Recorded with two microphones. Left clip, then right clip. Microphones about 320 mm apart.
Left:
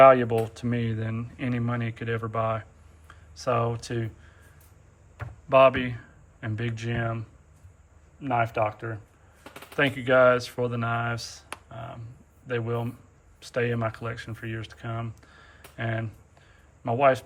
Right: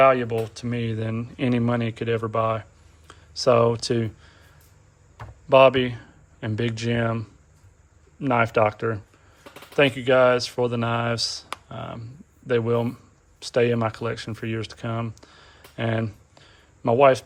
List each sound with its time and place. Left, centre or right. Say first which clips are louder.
0.0 s speech: left 2 dB; centre; by 9.0 s right
9.7 s speech: right 3 dB; centre